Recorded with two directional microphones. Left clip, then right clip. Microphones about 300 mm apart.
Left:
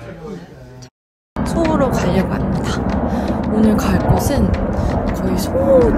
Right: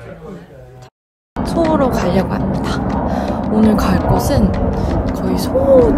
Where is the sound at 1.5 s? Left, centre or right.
Centre.